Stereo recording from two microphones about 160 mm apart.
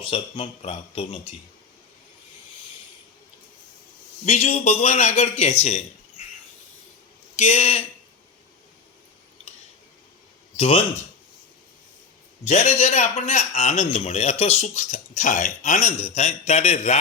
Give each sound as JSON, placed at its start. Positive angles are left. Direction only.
{"t": 0.0, "sound": "speech", "side_deg": 35}
{"t": 4.3, "sound": "a man's voice", "side_deg": 45}
{"t": 7.3, "sound": "a man's voice", "side_deg": 45}
{"t": 10.6, "sound": "speech", "side_deg": 40}
{"t": 12.5, "sound": "a man's voice", "side_deg": 45}